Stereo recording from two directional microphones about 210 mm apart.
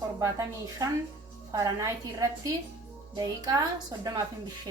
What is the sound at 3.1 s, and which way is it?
Speech, 20° right (ahead or behind).